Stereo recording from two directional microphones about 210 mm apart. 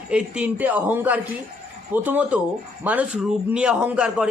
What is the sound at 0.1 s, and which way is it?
Speech, 5° right (ahead or behind).